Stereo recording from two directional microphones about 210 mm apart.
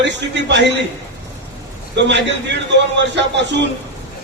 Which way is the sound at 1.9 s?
55° right (ahead or behind).